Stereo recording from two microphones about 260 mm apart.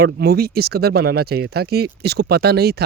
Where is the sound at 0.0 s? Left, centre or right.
Right.